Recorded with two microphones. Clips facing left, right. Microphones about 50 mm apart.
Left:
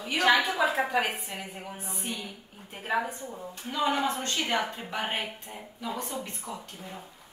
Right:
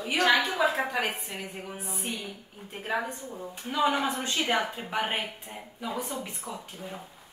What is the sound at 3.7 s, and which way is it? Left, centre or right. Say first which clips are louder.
Speech: right 1 dB; centre.